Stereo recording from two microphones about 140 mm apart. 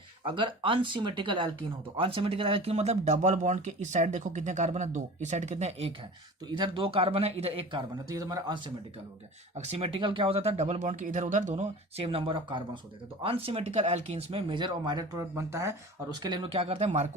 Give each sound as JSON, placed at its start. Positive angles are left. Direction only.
{"t": 0.3, "sound": "a man's voice", "side_deg": -35}
{"t": 6.5, "sound": "a man's voice", "side_deg": -35}
{"t": 9.7, "sound": "speech", "side_deg": -40}
{"t": 12.0, "sound": "a man's voice", "side_deg": -40}